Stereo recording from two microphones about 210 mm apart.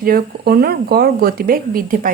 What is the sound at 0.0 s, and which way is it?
Speech, 45° right (ahead or behind).